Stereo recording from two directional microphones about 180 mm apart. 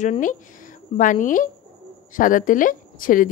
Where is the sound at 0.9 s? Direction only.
45° left (ahead or behind).